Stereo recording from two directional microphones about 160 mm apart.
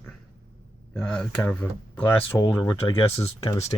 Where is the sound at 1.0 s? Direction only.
5° left (ahead or behind).